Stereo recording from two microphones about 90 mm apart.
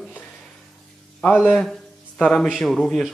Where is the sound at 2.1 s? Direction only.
10° left (ahead or behind).